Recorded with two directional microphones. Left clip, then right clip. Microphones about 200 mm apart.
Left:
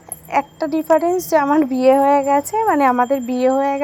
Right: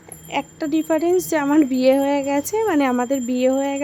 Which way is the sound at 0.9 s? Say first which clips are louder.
Left 5 dB; centre (ahead or behind).